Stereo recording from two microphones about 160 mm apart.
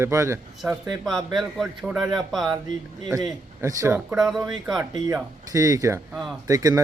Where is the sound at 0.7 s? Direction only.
5° right (ahead or behind).